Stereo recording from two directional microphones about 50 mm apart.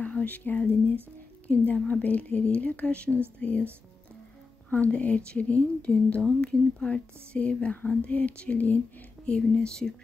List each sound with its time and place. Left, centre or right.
0.0 s speech: left
4.6 s speech: left